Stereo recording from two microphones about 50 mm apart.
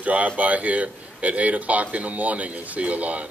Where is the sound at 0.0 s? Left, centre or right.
Right.